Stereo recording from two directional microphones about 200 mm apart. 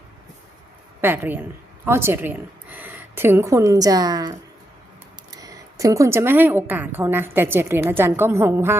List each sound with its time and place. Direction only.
1.0 s a woman's voice: 10° right (ahead or behind)